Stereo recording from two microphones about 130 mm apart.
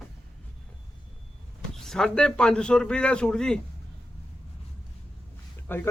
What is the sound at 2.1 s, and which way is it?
A man's voice, 5° left (ahead or behind).